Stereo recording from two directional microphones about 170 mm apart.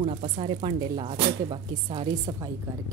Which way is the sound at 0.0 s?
35° right (ahead or behind).